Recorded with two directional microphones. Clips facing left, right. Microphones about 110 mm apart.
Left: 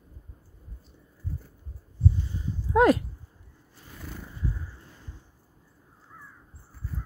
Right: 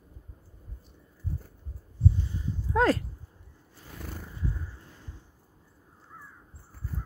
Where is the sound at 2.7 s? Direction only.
15° left (ahead or behind).